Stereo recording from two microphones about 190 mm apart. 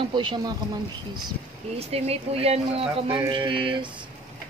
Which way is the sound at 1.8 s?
30° right (ahead or behind).